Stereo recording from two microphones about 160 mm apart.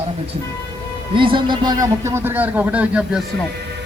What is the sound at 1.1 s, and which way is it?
Speech, 30° right (ahead or behind).